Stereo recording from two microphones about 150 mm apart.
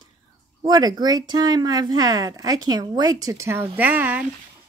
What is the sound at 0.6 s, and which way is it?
Speech, 25° right (ahead or behind).